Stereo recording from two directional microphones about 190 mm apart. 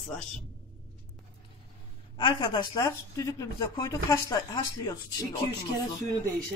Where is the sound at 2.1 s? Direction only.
25° left (ahead or behind).